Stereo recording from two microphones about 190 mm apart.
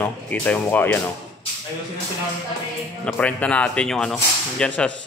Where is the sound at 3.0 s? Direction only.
5° left (ahead or behind).